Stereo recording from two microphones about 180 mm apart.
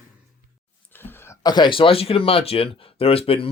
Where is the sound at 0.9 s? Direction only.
10° left (ahead or behind).